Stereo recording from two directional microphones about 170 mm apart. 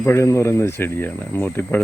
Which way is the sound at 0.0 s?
15° left (ahead or behind).